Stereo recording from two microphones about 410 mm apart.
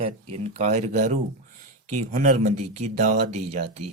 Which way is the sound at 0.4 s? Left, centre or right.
Centre.